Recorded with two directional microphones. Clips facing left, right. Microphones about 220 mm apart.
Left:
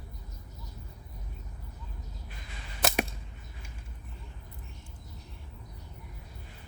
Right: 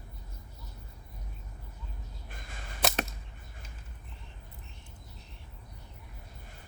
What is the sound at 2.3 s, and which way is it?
Crow, 50° right (ahead or behind).